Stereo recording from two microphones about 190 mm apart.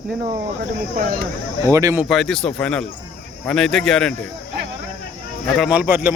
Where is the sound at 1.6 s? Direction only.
15° right (ahead or behind).